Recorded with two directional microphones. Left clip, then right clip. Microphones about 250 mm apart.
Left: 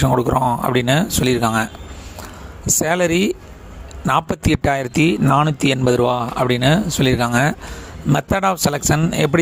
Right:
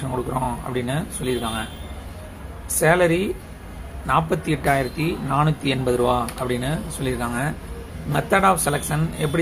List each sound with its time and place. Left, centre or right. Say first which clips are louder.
0.0 s speech: left 9 dB; left
2.8 s speech: right 1 dB; left